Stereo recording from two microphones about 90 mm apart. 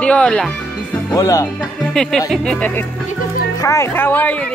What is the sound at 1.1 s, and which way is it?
Speech, 40° left (ahead or behind).